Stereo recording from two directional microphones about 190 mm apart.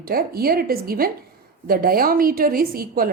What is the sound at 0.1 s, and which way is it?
A woman's voice, 50° right (ahead or behind).